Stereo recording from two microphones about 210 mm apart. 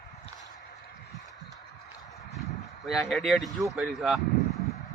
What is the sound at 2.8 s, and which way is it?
Speech, centre (ahead or behind).